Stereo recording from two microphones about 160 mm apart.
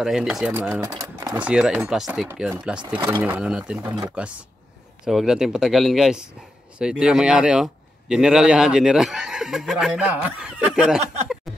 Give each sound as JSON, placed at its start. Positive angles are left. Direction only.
{"t": 0.0, "sound": "a man's voice", "side_deg": -5}
{"t": 1.4, "sound": "a man's voice", "side_deg": -5}
{"t": 3.0, "sound": "a man's voice", "side_deg": -15}
{"t": 11.5, "sound": "a sound", "side_deg": 0}